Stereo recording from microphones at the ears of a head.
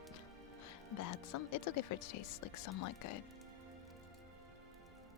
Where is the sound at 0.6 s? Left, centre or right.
Left.